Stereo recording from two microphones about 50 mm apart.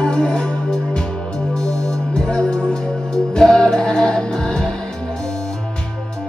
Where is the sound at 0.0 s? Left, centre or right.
Centre.